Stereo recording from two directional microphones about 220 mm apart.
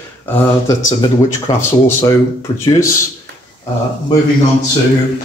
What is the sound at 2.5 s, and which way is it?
Speech, 25° left (ahead or behind).